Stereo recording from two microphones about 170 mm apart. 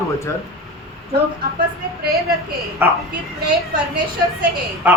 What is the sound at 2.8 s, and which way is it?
Speech, 10° right (ahead or behind).